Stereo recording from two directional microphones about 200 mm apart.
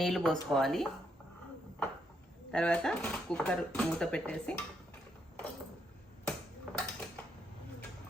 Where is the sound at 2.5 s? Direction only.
5° left (ahead or behind).